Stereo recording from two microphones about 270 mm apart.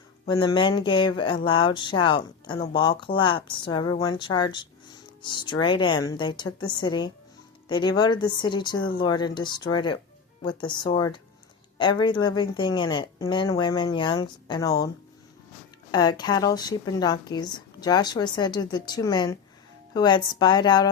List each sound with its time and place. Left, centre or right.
0.3 s a woman's voice: centre
15.9 s a woman's voice: centre